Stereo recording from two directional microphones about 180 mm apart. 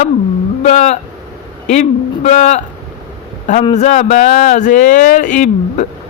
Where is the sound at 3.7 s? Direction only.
40° left (ahead or behind).